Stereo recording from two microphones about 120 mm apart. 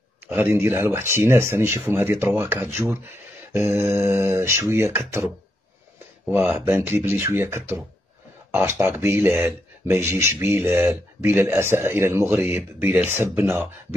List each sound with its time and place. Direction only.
0.4 s speech: 20° right (ahead or behind)